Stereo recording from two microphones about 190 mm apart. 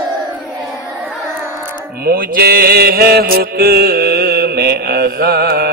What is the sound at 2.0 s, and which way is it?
Mantra, 55° right (ahead or behind).